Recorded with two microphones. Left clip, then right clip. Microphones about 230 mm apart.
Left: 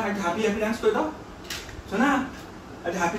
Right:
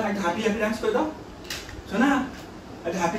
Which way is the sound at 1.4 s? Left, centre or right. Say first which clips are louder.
Even; centre.